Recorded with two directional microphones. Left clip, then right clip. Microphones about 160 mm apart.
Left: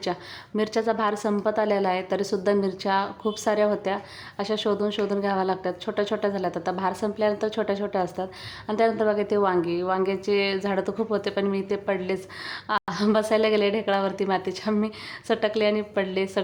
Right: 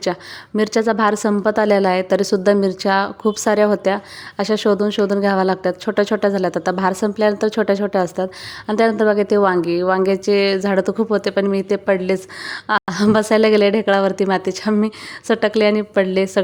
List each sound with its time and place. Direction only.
0.0 s a woman's voice: 35° right (ahead or behind)